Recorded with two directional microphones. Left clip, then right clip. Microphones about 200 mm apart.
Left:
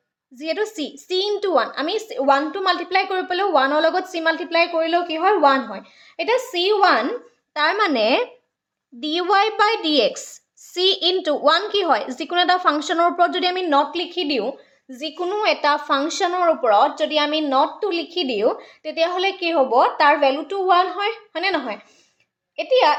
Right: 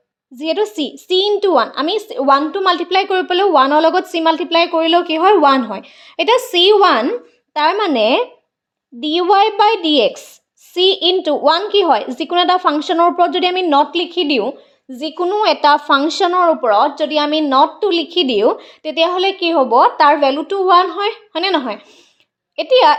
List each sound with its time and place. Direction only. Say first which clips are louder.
0.3 s a woman's voice: right 7 dB; 25° right (ahead or behind); by 23.0 s 40° right (ahead or behind)